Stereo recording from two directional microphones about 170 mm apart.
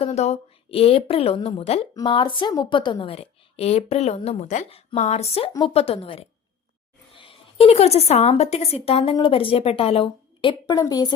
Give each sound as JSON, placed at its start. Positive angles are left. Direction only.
{"t": 0.0, "sound": "a woman's voice", "side_deg": 40}